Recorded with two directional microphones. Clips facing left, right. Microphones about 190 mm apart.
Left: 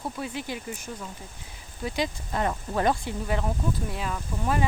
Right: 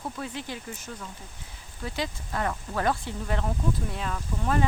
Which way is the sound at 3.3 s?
5° left (ahead or behind).